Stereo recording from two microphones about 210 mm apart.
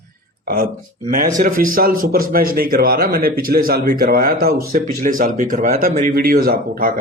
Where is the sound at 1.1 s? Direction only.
40° right (ahead or behind).